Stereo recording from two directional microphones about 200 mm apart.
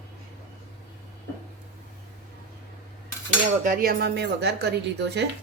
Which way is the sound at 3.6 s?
45° right (ahead or behind).